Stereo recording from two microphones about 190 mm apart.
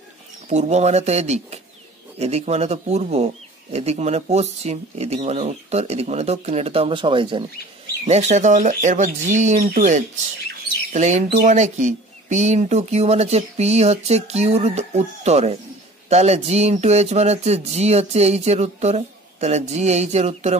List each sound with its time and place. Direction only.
0.5 s speech: 35° right (ahead or behind)
8.1 s speech: 35° right (ahead or behind)